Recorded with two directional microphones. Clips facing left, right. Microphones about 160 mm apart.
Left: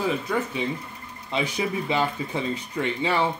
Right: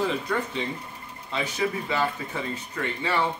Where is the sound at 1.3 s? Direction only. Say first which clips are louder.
Left 1 dB; 15° left (ahead or behind).